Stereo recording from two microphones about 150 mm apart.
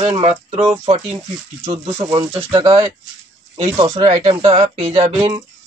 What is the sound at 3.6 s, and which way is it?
Speech, 45° right (ahead or behind).